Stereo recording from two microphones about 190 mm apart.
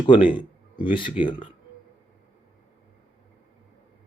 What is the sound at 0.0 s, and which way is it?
Speech, 25° left (ahead or behind).